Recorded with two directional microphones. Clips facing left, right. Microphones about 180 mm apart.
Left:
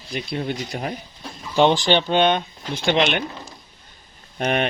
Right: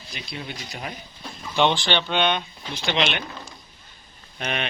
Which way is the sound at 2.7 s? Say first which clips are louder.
Left 5 dB; 50° left (ahead or behind).